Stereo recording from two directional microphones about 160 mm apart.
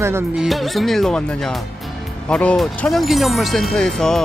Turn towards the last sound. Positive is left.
turn(degrees=0)  # may be behind; listen again after turning